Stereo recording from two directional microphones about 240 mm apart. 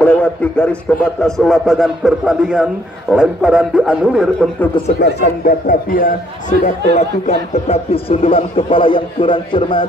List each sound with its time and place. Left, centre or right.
0.0 s a man's voice: centre
5.0 s a man's voice: left; by 9.8 s centre